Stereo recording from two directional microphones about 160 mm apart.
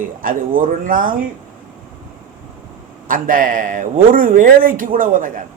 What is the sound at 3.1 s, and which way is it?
Speech, 60° right (ahead or behind).